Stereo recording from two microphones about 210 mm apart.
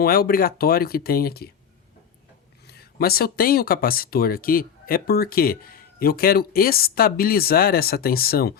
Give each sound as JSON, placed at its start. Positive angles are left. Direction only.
{"t": 0.0, "sound": "speech", "side_deg": 45}
{"t": 2.6, "sound": "speech", "side_deg": 45}